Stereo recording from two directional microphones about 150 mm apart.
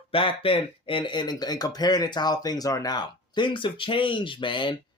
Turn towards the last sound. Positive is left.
turn(degrees=30)  # may be behind; listen again after turning